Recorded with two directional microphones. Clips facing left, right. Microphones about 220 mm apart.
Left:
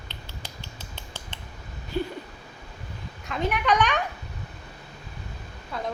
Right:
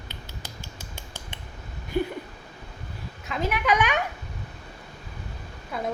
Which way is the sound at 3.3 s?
Centre (ahead or behind).